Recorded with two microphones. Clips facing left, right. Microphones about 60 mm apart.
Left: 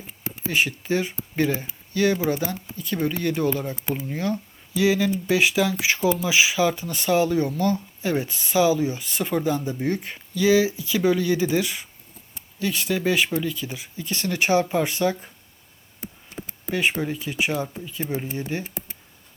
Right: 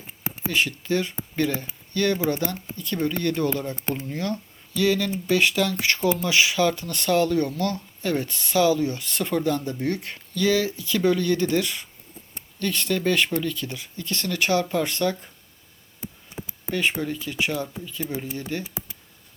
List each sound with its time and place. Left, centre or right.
0.5 s speech: centre
17.0 s speech: centre